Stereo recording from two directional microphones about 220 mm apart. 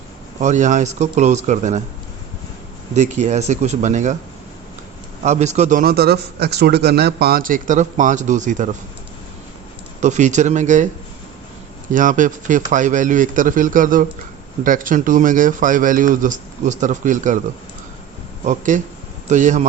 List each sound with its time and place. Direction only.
0.3 s a man's voice: 35° right (ahead or behind)
2.9 s a man's voice: 30° right (ahead or behind)
5.2 s a man's voice: 30° right (ahead or behind)
10.0 s a man's voice: 35° right (ahead or behind)
11.9 s a man's voice: 35° right (ahead or behind)
18.4 s a man's voice: 35° right (ahead or behind)